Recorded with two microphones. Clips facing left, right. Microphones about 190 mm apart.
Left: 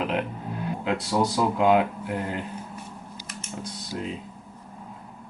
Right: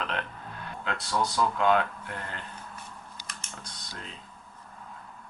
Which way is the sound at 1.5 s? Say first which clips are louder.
Left 5 dB; 10° left (ahead or behind).